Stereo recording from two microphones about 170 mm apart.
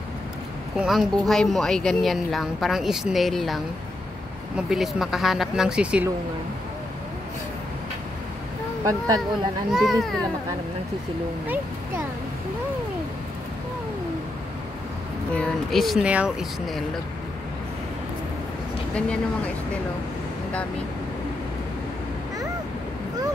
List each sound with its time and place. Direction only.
0.7 s speech: centre (ahead or behind)
8.8 s speech: 20° right (ahead or behind)
9.7 s speech: centre (ahead or behind)
15.3 s speech: centre (ahead or behind)
18.9 s speech: 5° left (ahead or behind)